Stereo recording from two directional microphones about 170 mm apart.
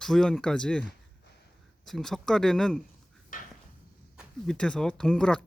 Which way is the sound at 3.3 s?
55° left (ahead or behind).